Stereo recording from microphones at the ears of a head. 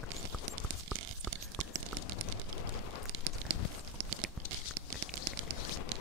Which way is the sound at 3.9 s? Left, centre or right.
Right.